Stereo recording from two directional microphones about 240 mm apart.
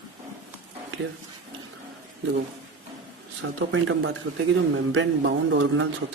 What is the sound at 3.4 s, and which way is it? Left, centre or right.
Speech, right.